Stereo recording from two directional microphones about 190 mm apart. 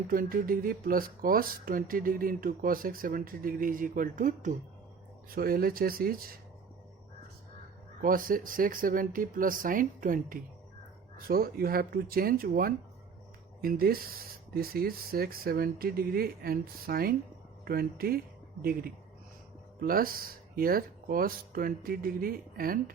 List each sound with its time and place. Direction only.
0.1 s speech: 50° right (ahead or behind)
8.0 s speech: 45° right (ahead or behind)